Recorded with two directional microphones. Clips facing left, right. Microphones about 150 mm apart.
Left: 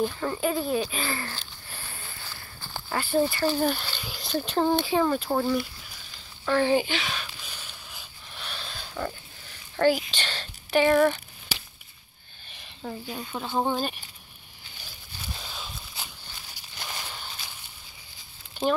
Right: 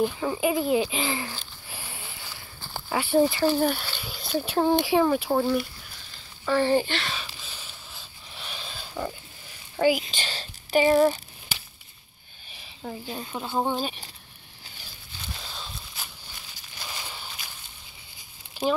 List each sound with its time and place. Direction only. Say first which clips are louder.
0.0 s speech: right 2 dB; 10° right (ahead or behind)
6.4 s a sound: right 1 dB; centre (ahead or behind)
9.8 s speech: even; 10° right (ahead or behind)
10.9 s speech: right 1 dB; 30° right (ahead or behind)
12.4 s a sound: even; 5° right (ahead or behind)
13.3 s speech: even; 5° right (ahead or behind)
15.4 s walk: even; 5° left (ahead or behind)
18.6 s speech: even; 5° right (ahead or behind)